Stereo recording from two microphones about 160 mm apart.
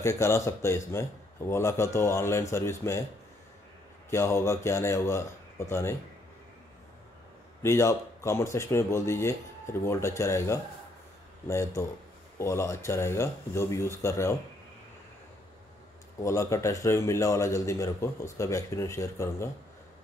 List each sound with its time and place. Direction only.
0.0 s speech: 20° left (ahead or behind)
4.1 s speech: 15° left (ahead or behind)
7.6 s speech: 20° left (ahead or behind)
16.2 s a man's voice: 20° left (ahead or behind)